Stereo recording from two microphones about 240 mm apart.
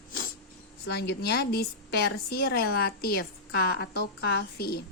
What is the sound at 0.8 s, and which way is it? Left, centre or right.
A woman's voice, left.